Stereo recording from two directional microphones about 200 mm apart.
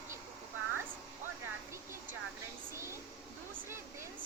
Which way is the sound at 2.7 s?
15° right (ahead or behind).